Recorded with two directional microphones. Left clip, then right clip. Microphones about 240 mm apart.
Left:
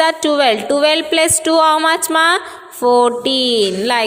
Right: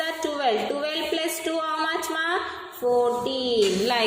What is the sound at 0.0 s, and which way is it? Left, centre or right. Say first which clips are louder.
A woman's voice: left 12 dB; left.